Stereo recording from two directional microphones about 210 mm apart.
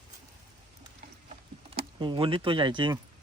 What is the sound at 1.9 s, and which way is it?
Speech, 25° right (ahead or behind).